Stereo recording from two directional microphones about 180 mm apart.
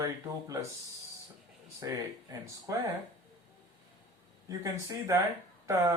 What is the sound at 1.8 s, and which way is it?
Speech, 20° right (ahead or behind).